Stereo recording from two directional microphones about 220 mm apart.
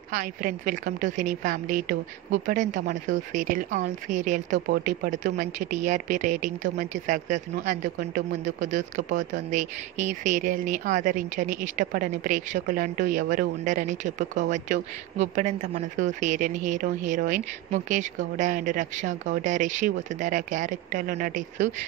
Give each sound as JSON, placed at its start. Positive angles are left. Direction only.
{"t": 0.1, "sound": "speech", "side_deg": -40}